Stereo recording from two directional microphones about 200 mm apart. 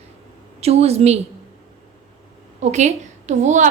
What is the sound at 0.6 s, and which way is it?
Speech, 30° right (ahead or behind).